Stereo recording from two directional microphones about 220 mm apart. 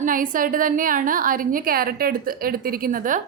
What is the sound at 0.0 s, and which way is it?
A woman's voice, 40° right (ahead or behind).